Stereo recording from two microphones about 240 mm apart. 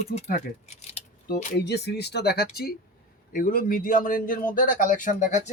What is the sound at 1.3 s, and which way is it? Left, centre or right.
Speech, left.